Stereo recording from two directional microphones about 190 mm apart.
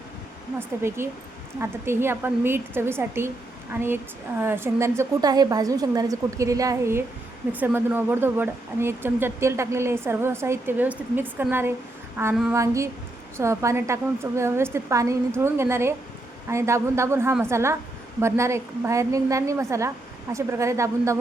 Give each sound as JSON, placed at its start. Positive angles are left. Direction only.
{"t": 0.8, "sound": "speech", "side_deg": -15}